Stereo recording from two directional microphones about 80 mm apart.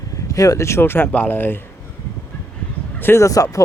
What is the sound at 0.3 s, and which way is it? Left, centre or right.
Speech, left.